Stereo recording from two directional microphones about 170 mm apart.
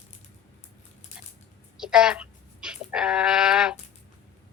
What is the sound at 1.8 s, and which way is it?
Speech, 5° right (ahead or behind).